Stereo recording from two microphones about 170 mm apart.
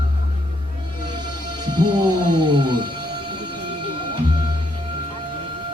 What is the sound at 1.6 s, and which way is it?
Music, 25° right (ahead or behind).